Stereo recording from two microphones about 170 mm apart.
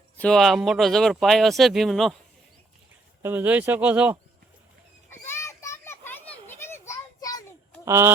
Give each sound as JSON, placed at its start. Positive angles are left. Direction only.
{"t": 0.2, "sound": "speech", "side_deg": 5}
{"t": 3.2, "sound": "speech", "side_deg": -10}
{"t": 5.0, "sound": "children playing", "side_deg": 15}
{"t": 7.9, "sound": "speech", "side_deg": -15}